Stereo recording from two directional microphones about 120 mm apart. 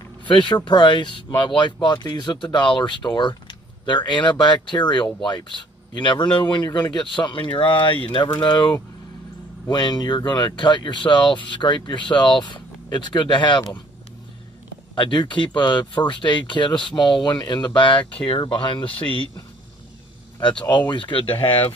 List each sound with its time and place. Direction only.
0.3 s speech: 40° left (ahead or behind)
15.0 s speech: 40° left (ahead or behind)
20.9 s speech: 45° left (ahead or behind)